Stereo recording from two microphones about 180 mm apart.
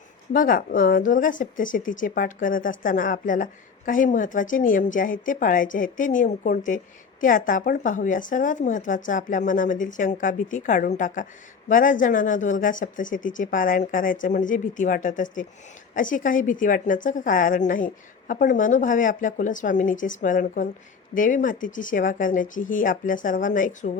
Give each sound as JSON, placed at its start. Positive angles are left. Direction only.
{"t": 0.3, "sound": "speech", "side_deg": 50}